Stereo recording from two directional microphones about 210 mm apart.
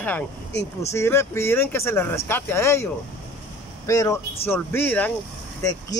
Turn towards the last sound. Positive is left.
turn(degrees=15)  # may be behind; listen again after turning